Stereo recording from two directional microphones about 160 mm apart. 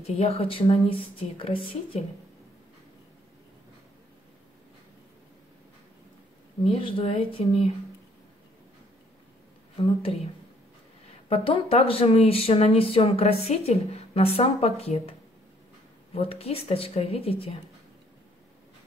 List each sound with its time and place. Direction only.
0.0 s speech: 40° left (ahead or behind)
6.6 s speech: 30° left (ahead or behind)
9.8 s speech: 35° left (ahead or behind)
16.2 s speech: 40° left (ahead or behind)